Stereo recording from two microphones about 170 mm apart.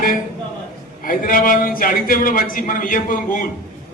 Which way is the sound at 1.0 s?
55° left (ahead or behind).